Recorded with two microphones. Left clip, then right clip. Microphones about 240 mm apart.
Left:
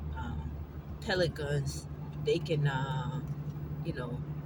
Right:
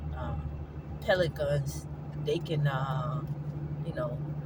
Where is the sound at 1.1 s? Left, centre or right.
Right.